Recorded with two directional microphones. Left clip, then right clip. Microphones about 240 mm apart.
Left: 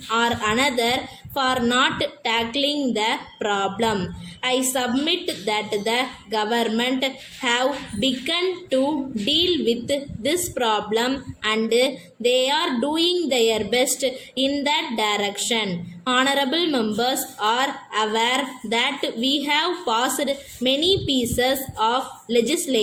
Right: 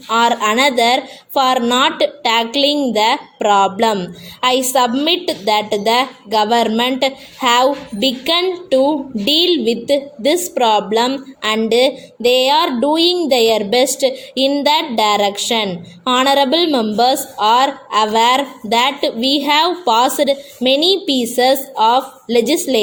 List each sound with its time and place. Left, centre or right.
0.1 s a woman's voice: right